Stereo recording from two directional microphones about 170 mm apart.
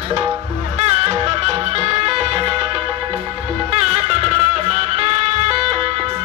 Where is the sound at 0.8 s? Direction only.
40° right (ahead or behind).